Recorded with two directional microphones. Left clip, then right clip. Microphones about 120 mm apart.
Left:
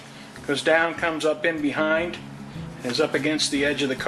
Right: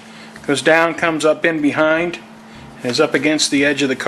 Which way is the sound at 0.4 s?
35° right (ahead or behind).